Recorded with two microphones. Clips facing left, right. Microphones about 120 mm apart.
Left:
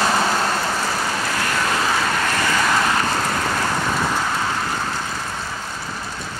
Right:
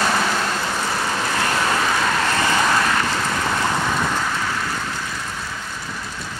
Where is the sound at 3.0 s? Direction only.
35° left (ahead or behind).